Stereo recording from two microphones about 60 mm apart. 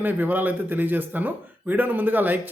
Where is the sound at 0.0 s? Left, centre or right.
Right.